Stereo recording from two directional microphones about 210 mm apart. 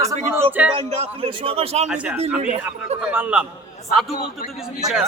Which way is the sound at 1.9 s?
5° right (ahead or behind).